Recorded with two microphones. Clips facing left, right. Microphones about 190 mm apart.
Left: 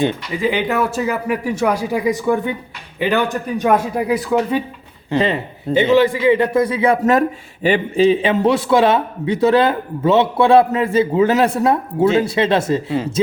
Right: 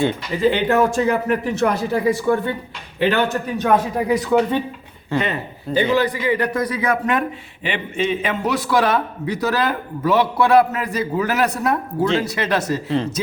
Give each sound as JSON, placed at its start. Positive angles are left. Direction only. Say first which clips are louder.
{"t": 0.0, "sound": "speech", "louder": "even", "side_deg": 15}
{"t": 5.1, "sound": "a man's voice", "louder": "left 4 dB", "side_deg": 25}
{"t": 7.0, "sound": "a man's voice", "louder": "left 6 dB", "side_deg": 40}